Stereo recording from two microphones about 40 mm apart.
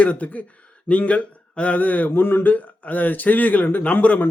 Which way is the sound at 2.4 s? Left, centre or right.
Left.